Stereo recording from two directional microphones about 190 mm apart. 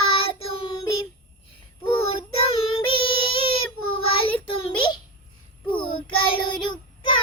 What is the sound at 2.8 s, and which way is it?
Child singing, 25° left (ahead or behind).